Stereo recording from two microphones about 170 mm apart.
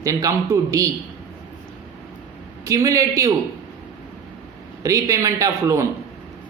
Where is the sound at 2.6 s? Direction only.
20° right (ahead or behind).